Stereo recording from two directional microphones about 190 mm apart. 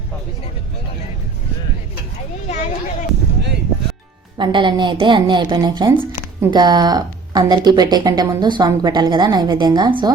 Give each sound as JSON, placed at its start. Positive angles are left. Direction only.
{"t": 2.5, "sound": "children playing", "side_deg": 40}
{"t": 4.4, "sound": "speech", "side_deg": -25}